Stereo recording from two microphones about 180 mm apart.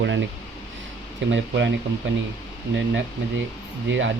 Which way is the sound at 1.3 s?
85° right.